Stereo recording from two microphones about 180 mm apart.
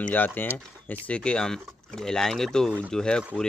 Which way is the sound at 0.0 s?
10° left (ahead or behind).